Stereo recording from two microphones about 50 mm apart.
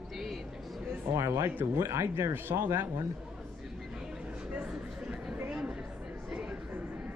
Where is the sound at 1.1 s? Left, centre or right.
Right.